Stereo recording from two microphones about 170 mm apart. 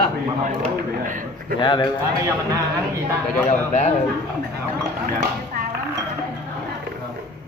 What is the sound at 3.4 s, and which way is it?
Speech, 45° left (ahead or behind).